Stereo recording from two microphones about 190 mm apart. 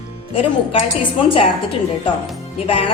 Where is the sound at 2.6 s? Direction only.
30° left (ahead or behind).